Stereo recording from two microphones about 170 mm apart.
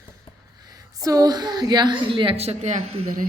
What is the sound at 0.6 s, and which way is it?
A woman's voice, 20° right (ahead or behind).